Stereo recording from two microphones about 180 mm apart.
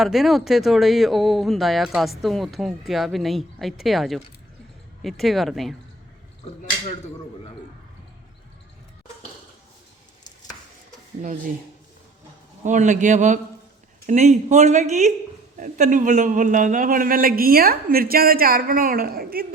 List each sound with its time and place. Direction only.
0.0 s speech: centre (ahead or behind)
11.2 s a man's voice: 45° right (ahead or behind)
12.6 s a man's voice: 40° right (ahead or behind)